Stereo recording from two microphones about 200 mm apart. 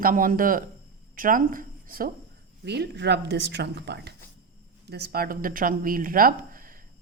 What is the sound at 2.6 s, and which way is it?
Speech, 55° right (ahead or behind).